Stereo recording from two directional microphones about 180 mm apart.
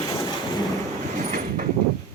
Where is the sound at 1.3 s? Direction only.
45° right (ahead or behind).